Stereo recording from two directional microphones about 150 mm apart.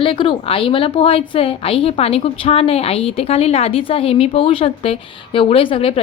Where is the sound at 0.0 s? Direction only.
35° left (ahead or behind).